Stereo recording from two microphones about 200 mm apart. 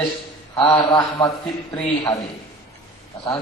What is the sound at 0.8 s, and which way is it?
Speech, 20° left (ahead or behind).